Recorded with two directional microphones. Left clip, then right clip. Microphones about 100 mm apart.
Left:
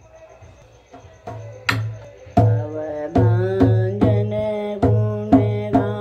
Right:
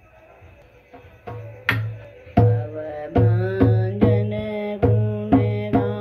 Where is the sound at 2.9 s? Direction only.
40° left (ahead or behind).